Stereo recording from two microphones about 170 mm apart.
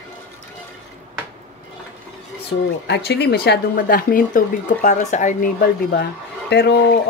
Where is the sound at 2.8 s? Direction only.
85° left; by 5.5 s 45° left (ahead or behind).